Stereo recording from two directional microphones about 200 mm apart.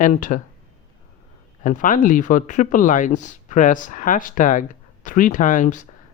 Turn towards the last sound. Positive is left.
turn(degrees=40)  # may be behind; listen again after turning